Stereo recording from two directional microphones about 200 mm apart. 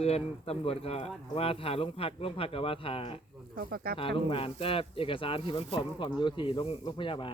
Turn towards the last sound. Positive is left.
turn(degrees=25)  # may be behind; listen again after turning